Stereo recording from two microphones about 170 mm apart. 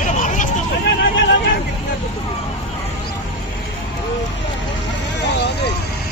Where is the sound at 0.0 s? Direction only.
45° left (ahead or behind).